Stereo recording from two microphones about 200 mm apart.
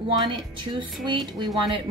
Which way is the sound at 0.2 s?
25° right (ahead or behind).